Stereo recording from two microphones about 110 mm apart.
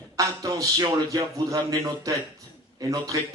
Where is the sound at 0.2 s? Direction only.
30° right (ahead or behind).